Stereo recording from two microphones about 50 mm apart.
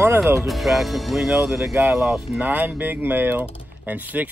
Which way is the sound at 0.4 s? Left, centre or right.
Centre.